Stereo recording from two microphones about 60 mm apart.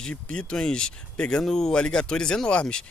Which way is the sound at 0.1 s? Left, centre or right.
Centre.